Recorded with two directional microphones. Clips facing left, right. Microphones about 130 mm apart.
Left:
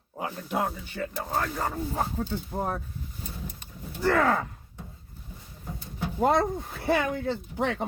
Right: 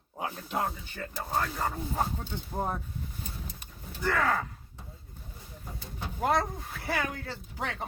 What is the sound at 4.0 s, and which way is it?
Speech, 25° left (ahead or behind).